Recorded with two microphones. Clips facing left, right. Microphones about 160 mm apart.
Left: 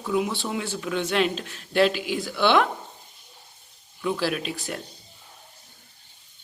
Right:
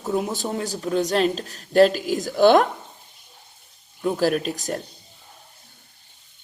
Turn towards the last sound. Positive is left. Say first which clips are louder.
# right 5 dB
turn(degrees=-40)  # may be behind; listen again after turning